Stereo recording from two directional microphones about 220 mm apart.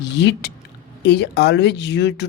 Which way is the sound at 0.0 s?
55° left (ahead or behind).